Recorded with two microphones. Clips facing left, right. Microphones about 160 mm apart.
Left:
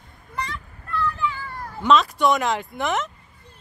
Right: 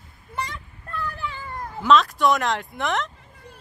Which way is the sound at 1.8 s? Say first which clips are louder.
Even; centre (ahead or behind).